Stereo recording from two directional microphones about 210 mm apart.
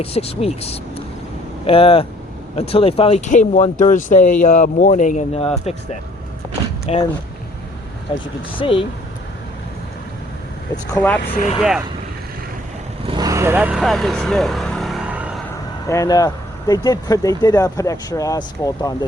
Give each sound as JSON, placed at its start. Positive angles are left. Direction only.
{"t": 0.0, "sound": "speech", "side_deg": 30}
{"t": 6.9, "sound": "speech", "side_deg": 30}
{"t": 8.1, "sound": "speech", "side_deg": 25}
{"t": 10.9, "sound": "speech", "side_deg": 10}
{"t": 11.2, "sound": "speech", "side_deg": 40}
{"t": 13.1, "sound": "vehicle", "side_deg": -20}
{"t": 15.9, "sound": "speech", "side_deg": 15}